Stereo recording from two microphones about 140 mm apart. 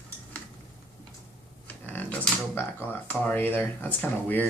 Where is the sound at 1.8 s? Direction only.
15° left (ahead or behind).